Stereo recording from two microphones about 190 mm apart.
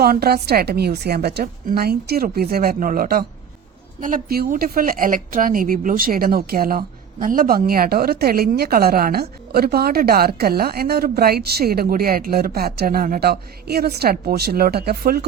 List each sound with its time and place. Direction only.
0.0 s a woman's voice: 55° right (ahead or behind)